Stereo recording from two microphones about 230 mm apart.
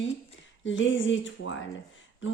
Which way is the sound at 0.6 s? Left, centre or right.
Left.